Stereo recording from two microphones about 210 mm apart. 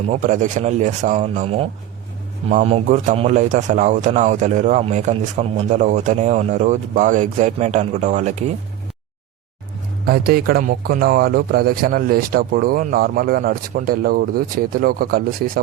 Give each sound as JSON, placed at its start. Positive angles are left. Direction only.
{"t": 0.1, "sound": "a man's voice", "side_deg": -35}
{"t": 10.1, "sound": "speech", "side_deg": -45}